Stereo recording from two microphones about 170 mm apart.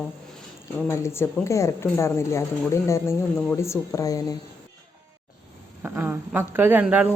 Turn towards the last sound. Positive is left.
turn(degrees=-10)  # may be behind; listen again after turning